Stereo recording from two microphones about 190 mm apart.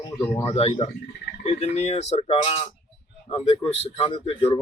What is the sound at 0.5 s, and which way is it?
Speech, 30° left (ahead or behind).